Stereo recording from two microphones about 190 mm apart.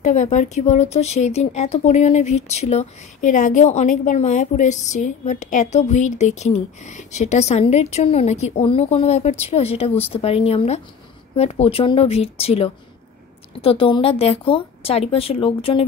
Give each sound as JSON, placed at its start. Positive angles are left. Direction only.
{"t": 0.0, "sound": "a woman's voice", "side_deg": 40}